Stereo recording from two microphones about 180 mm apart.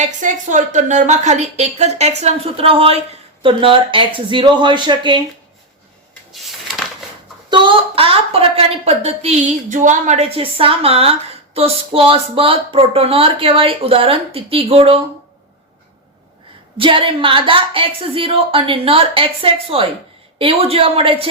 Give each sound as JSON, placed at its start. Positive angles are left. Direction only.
{"t": 0.0, "sound": "a woman's voice", "side_deg": -45}
{"t": 7.5, "sound": "a woman's voice", "side_deg": -30}
{"t": 16.7, "sound": "a woman's voice", "side_deg": -30}